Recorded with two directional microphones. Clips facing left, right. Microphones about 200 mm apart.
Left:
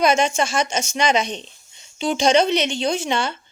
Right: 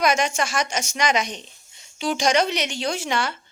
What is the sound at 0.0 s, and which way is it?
A woman's voice, 25° left (ahead or behind).